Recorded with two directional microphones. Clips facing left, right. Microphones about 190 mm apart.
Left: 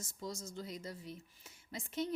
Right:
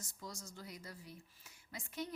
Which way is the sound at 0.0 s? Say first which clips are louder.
Left 6 dB; 25° left (ahead or behind).